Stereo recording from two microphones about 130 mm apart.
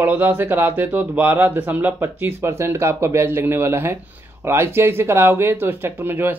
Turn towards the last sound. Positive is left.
turn(degrees=-15)  # may be behind; listen again after turning